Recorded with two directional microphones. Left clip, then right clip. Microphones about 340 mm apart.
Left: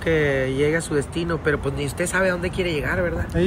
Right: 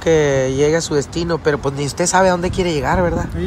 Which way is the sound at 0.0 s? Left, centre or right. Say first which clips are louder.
Right 6 dB; centre.